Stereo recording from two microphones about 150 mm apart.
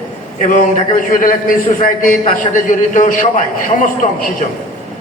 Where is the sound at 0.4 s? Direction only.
60° left (ahead or behind).